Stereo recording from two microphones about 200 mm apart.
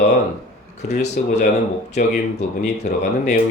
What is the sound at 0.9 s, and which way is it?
Speech, 35° left (ahead or behind).